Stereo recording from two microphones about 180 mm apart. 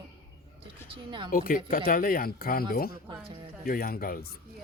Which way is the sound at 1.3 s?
50° left (ahead or behind).